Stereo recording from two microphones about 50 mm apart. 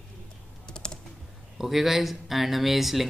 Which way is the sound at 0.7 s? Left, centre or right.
Centre.